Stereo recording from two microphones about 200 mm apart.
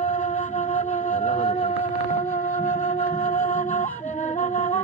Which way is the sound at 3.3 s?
40° left (ahead or behind).